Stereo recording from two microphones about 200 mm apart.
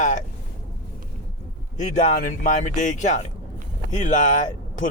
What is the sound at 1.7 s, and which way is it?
Speech, 35° left (ahead or behind).